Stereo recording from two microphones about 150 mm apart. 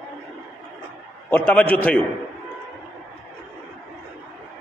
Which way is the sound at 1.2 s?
10° left (ahead or behind).